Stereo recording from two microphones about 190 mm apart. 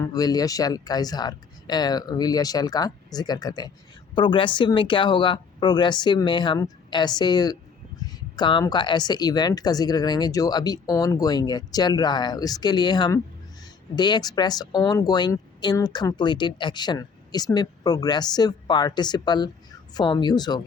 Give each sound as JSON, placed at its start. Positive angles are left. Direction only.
{"t": 0.0, "sound": "speech", "side_deg": 20}